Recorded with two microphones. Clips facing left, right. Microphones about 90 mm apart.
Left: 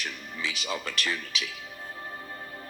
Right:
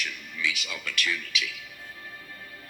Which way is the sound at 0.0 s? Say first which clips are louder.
Right 2 dB; 35° left (ahead or behind).